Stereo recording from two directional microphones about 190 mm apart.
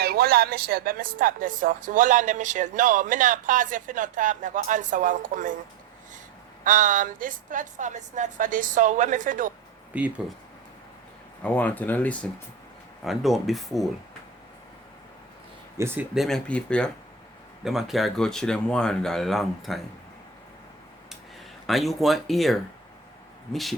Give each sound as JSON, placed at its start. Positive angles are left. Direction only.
{"t": 0.0, "sound": "speech", "side_deg": -55}
{"t": 6.7, "sound": "a woman's voice", "side_deg": -40}
{"t": 9.9, "sound": "speech", "side_deg": -5}
{"t": 11.4, "sound": "speech", "side_deg": 10}
{"t": 15.8, "sound": "speech", "side_deg": -5}
{"t": 21.7, "sound": "speech", "side_deg": 0}